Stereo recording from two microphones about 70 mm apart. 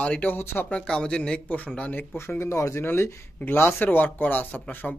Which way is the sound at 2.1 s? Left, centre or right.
Left.